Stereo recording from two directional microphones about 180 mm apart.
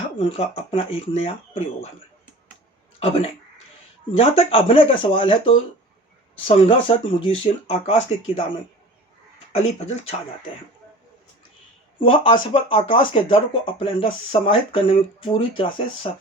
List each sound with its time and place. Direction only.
0.2 s speech: 30° left (ahead or behind)
3.0 s speech: 35° left (ahead or behind)
9.5 s speech: 35° left (ahead or behind)
11.9 s speech: 30° left (ahead or behind)